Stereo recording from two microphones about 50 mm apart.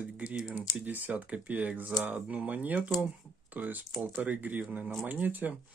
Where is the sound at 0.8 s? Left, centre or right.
Right.